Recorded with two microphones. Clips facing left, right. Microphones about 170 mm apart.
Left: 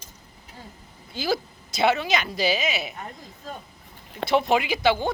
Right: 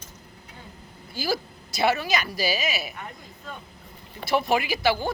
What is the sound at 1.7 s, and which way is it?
Speech, 20° left (ahead or behind).